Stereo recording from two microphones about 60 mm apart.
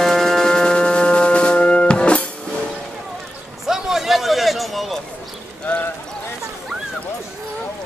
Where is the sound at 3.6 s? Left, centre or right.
Centre.